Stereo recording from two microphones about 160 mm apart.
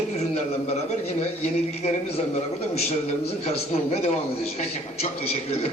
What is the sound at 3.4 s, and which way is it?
A man's voice, 40° left (ahead or behind).